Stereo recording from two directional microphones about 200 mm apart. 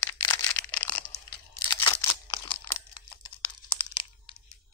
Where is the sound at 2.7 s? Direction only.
15° left (ahead or behind).